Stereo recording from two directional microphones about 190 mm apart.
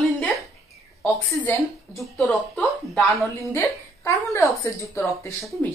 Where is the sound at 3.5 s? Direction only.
15° left (ahead or behind).